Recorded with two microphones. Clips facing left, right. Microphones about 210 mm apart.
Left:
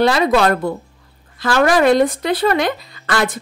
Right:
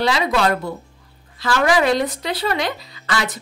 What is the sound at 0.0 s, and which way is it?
Speech, 50° left (ahead or behind).